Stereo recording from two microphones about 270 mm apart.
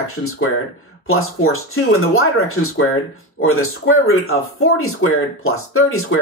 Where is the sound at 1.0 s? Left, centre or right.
Left.